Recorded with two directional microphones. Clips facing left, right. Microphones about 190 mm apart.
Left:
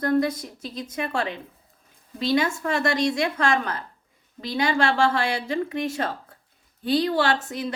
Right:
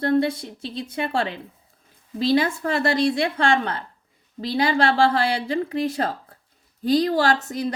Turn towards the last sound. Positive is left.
turn(degrees=-40)  # may be behind; listen again after turning